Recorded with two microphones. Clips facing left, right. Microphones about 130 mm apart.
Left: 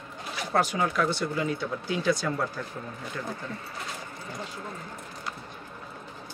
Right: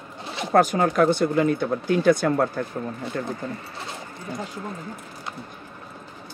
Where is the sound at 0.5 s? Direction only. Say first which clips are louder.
Right 7 dB; 50° right (ahead or behind).